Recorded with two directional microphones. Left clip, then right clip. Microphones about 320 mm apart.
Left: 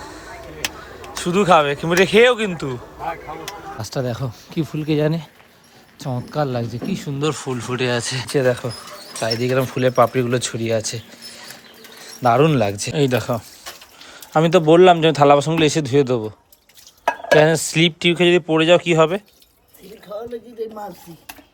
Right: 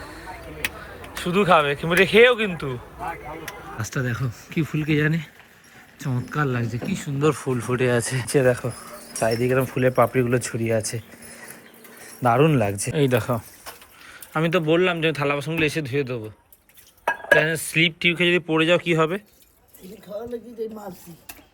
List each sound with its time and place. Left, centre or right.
1.1 s speech: centre
3.8 s speech: centre
12.2 s a man's voice: centre
17.3 s speech: centre
20.6 s speech: centre